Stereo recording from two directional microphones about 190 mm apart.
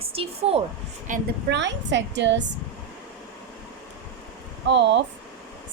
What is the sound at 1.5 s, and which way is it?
Speech, 70° right (ahead or behind).